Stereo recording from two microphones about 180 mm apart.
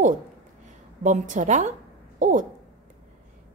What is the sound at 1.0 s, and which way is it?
A woman's voice, 45° right (ahead or behind).